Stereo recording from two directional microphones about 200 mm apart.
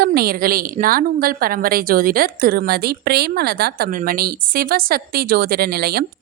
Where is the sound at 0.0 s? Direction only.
50° right (ahead or behind).